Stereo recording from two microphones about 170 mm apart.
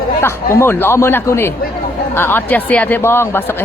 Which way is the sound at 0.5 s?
15° left (ahead or behind).